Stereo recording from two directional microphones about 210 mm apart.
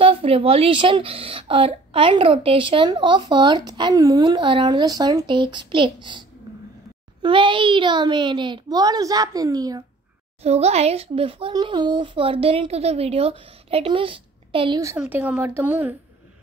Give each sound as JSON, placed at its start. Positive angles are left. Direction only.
{"t": 0.0, "sound": "speech", "side_deg": -25}
{"t": 10.4, "sound": "speech", "side_deg": -30}
{"t": 15.0, "sound": "speech", "side_deg": -5}